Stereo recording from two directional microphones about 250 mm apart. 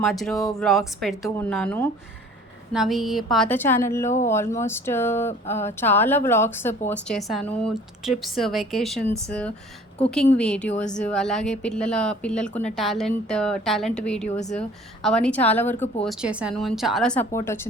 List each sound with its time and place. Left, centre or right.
0.0 s speech: centre
14.3 s speech: left
15.0 s speech: centre
16.0 s speech: centre